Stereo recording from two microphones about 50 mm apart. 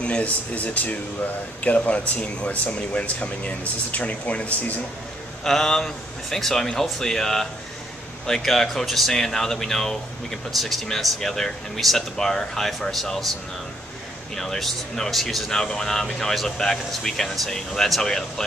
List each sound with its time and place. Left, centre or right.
0.0 s speech: left
5.4 s speech: centre
14.3 s speech: centre